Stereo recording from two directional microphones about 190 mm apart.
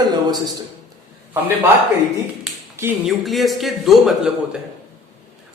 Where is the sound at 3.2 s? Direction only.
Centre (ahead or behind).